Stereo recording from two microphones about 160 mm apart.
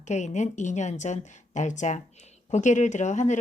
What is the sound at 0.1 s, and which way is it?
Speech, 45° left (ahead or behind).